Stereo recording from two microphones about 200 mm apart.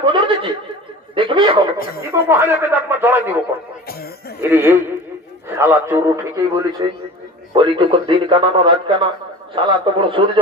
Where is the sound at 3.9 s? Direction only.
50° left (ahead or behind).